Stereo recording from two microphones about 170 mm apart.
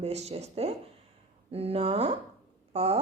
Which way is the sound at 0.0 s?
40° right (ahead or behind).